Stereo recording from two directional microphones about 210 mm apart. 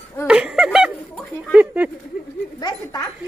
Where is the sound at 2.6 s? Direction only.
20° left (ahead or behind).